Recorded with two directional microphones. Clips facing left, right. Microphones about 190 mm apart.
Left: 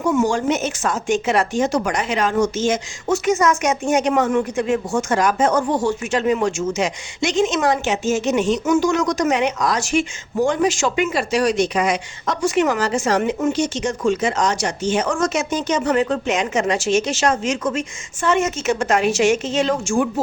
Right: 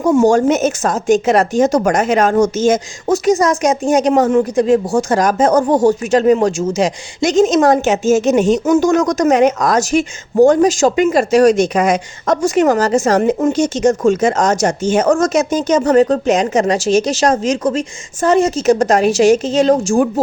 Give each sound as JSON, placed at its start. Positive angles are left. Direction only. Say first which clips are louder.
{"t": 0.0, "sound": "speech", "louder": "right 7 dB", "side_deg": -35}